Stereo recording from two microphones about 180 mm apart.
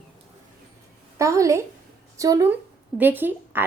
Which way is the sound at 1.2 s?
15° right (ahead or behind).